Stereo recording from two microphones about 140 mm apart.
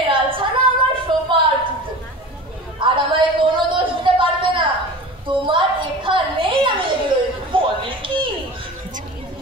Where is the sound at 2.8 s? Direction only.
35° right (ahead or behind).